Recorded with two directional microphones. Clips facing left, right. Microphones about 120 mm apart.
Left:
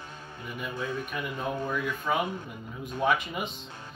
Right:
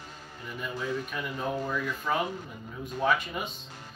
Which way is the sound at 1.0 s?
15° left (ahead or behind).